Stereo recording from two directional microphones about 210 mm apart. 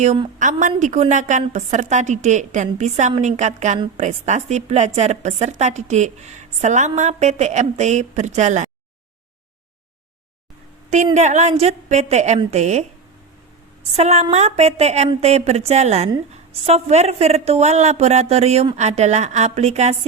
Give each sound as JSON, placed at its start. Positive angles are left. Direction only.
{"t": 0.0, "sound": "speech", "side_deg": -30}
{"t": 10.8, "sound": "speech", "side_deg": -35}
{"t": 13.9, "sound": "speech", "side_deg": -30}